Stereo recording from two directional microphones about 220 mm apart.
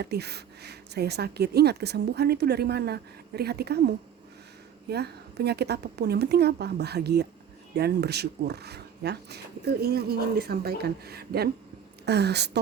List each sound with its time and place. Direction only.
0.0 s speech: 50° right (ahead or behind)